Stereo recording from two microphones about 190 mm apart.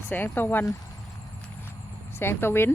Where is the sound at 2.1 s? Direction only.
10° left (ahead or behind).